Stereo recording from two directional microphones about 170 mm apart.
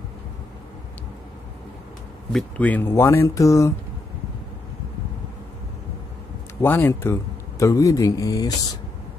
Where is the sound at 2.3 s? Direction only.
10° left (ahead or behind).